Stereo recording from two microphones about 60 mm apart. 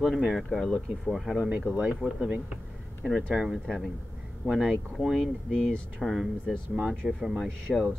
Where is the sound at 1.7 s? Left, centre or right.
Right.